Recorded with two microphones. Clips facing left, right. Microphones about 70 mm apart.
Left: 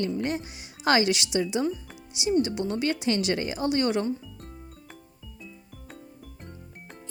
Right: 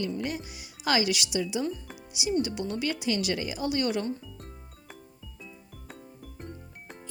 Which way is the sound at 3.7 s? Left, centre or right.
Left.